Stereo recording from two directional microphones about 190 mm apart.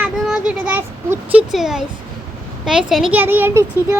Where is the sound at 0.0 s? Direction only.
5° right (ahead or behind).